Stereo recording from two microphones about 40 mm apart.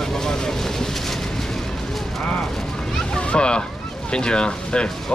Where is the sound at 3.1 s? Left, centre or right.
Left.